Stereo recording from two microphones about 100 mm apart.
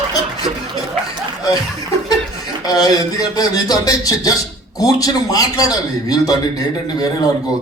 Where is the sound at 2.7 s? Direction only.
40° left (ahead or behind).